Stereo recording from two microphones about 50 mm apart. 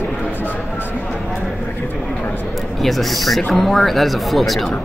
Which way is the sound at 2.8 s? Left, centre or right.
Centre.